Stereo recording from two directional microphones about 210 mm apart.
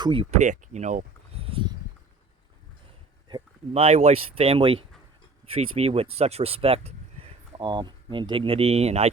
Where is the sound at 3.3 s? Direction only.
30° right (ahead or behind).